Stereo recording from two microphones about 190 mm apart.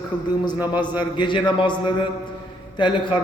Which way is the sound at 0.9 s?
25° left (ahead or behind).